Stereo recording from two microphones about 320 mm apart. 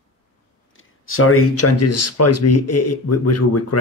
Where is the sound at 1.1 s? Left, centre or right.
Left.